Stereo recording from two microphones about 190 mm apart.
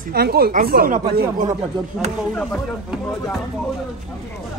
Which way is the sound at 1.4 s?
40° right (ahead or behind).